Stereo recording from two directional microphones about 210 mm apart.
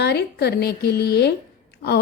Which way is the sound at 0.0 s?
50° left (ahead or behind).